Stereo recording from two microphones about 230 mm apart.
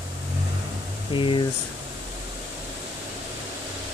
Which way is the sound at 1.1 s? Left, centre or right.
Left.